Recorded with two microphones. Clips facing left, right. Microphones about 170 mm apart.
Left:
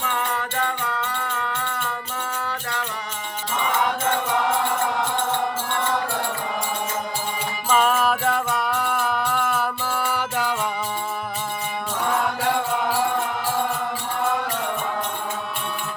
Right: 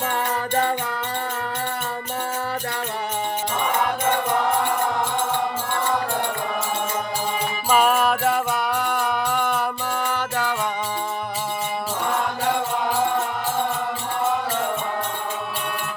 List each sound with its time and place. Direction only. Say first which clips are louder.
0.0 s music: right 2 dB; 35° right (ahead or behind)
7.7 s music: right 1 dB; 5° right (ahead or behind); by 10.5 s 10° left (ahead or behind)